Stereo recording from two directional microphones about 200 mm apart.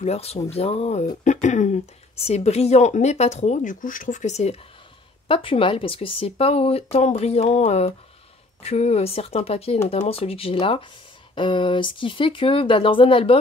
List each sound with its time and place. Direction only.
0.0 s speech: 30° left (ahead or behind)